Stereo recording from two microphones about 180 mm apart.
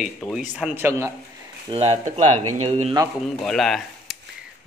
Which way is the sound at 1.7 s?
35° right (ahead or behind).